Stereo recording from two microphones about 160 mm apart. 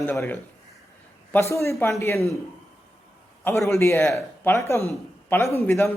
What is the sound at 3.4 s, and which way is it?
A man's voice, 15° left (ahead or behind).